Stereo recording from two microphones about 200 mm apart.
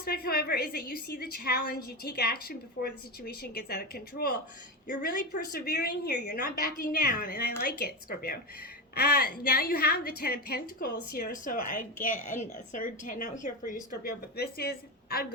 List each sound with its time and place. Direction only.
0.0 s a woman's voice: 50° left (ahead or behind)
5.3 s a woman's voice: 55° left (ahead or behind)